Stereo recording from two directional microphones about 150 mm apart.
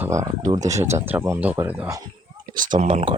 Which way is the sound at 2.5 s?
60° right (ahead or behind).